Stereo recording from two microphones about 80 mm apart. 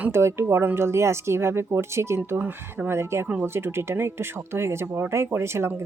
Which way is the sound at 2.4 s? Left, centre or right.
Centre.